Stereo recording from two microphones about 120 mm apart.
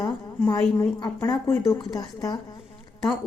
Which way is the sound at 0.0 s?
30° left (ahead or behind).